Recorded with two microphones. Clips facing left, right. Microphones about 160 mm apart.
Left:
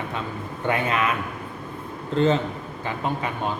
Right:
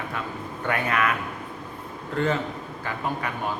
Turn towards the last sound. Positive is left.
turn(degrees=20)  # may be behind; listen again after turning